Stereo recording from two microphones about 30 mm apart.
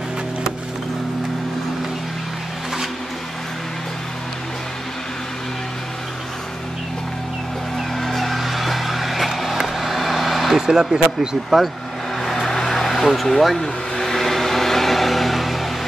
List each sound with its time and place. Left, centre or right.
7.9 s music: centre
8.4 s music: centre
9.6 s vehicle: centre
10.7 s speech: right
11.5 s speech: centre
12.2 s vehicle: centre